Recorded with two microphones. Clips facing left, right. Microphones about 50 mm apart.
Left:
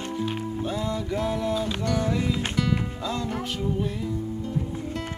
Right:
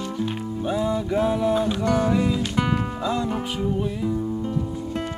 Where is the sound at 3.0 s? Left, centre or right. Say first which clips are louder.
Right 4 dB; centre.